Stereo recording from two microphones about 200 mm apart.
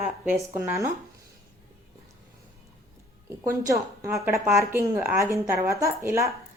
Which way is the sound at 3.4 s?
15° right (ahead or behind).